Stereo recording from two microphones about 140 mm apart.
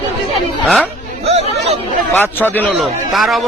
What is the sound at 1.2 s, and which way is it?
Speech, 45° right (ahead or behind).